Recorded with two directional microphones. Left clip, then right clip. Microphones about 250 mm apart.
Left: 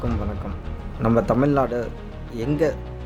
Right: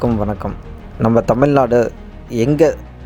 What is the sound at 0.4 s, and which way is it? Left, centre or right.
Speech, right.